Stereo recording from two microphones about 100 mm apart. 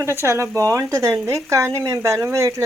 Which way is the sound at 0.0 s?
30° right (ahead or behind).